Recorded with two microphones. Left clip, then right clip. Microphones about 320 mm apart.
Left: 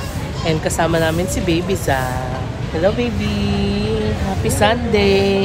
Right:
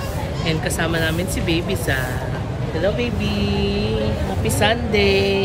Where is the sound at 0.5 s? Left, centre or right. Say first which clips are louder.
Left 5 dB; centre.